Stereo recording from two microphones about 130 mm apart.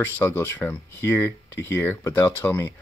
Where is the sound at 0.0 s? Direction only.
20° left (ahead or behind).